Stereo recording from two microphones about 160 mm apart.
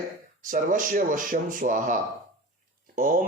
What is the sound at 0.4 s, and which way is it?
Speech, 55° right (ahead or behind).